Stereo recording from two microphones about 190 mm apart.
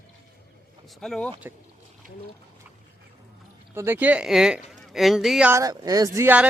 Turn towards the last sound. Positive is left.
turn(degrees=-10)  # may be behind; listen again after turning